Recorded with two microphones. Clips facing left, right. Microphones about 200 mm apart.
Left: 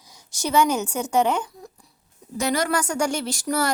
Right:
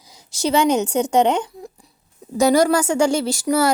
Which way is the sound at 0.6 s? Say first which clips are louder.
Right 6 dB; 20° right (ahead or behind).